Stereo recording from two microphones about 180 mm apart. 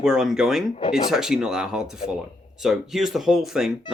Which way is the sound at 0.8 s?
25° left (ahead or behind).